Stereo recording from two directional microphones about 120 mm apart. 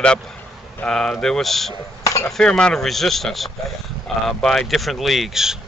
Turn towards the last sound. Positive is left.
turn(degrees=-5)  # may be behind; listen again after turning